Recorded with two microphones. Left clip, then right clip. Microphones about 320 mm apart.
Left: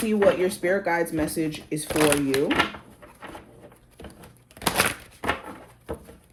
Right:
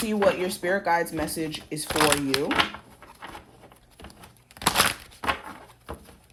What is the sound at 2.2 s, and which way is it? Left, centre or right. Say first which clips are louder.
Speech: left 2 dB; right.